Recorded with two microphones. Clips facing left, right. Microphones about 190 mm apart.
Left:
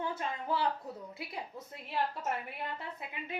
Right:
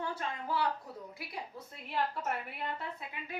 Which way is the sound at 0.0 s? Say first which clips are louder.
Left 1 dB; 20° left (ahead or behind).